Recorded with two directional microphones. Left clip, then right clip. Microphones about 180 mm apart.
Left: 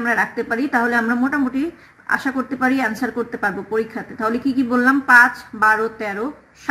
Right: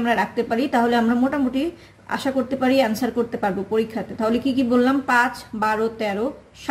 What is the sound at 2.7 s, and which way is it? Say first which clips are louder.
Speech: right 1 dB; 15° right (ahead or behind).